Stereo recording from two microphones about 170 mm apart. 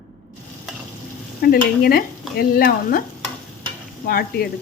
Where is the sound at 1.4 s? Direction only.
60° left (ahead or behind).